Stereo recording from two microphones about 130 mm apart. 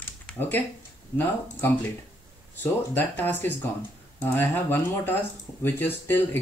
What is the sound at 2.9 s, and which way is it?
Speech, 15° left (ahead or behind).